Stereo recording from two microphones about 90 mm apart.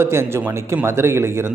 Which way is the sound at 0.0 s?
30° right (ahead or behind).